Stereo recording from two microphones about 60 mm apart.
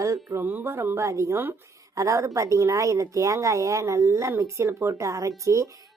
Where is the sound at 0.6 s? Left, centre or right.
Right.